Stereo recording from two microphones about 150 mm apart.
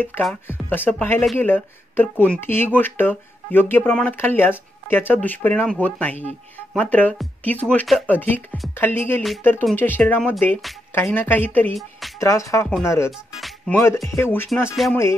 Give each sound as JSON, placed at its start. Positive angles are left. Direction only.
{"t": 0.0, "sound": "speech", "side_deg": 10}
{"t": 14.8, "sound": "speech", "side_deg": 0}